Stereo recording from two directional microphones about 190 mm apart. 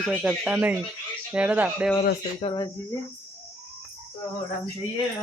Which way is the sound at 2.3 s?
25° left (ahead or behind).